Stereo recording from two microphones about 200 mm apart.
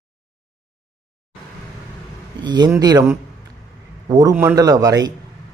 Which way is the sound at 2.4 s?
20° right (ahead or behind).